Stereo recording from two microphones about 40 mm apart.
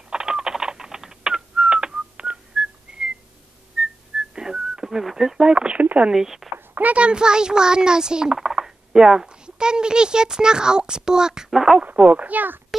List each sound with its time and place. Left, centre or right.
0.1 s a sound: centre
2.5 s whistling: centre
3.8 s whistling: centre
5.1 s speech: centre
5.5 s speech: right
6.1 s speech: centre
6.8 s speech: right; by 11.8 s centre
11.8 s speech: right